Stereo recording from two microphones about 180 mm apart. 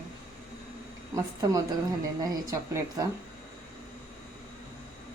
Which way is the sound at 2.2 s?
15° right (ahead or behind).